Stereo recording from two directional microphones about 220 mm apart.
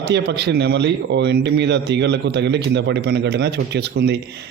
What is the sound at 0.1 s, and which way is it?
A man's voice, 50° right (ahead or behind).